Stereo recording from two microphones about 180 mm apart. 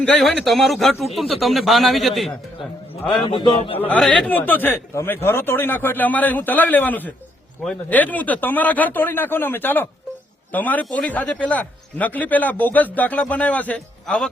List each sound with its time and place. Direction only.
0.0 s speech: 5° left (ahead or behind)
3.2 s a man's voice: 30° left (ahead or behind)
3.8 s a man's voice: 5° left (ahead or behind)